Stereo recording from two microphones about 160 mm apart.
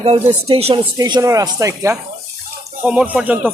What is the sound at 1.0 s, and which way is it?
Speech, 25° right (ahead or behind).